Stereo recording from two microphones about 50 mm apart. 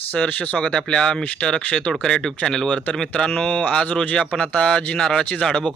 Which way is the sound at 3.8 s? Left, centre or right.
Centre.